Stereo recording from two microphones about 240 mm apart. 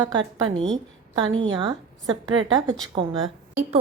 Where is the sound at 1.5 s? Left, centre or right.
Centre.